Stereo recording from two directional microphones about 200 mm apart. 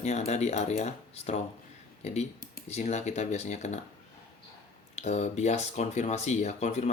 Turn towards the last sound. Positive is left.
turn(degrees=35)  # may be behind; listen again after turning